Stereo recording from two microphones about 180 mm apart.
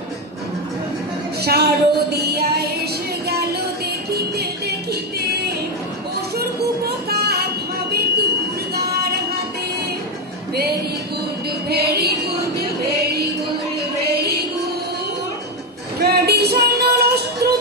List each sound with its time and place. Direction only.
1.4 s music: 60° right (ahead or behind)
4.1 s music: 60° right (ahead or behind)
6.3 s music: 60° right (ahead or behind)
8.7 s a sound: 60° right (ahead or behind)
11.7 s music: 65° right (ahead or behind)
16.0 s a sound: 65° right (ahead or behind)